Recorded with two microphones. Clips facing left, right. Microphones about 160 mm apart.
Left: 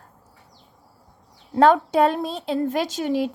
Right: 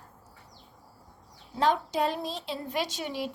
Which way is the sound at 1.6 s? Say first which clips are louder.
Left 10 dB; 60° left (ahead or behind).